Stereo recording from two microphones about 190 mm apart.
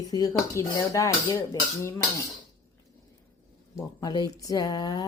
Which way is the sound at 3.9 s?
20° left (ahead or behind).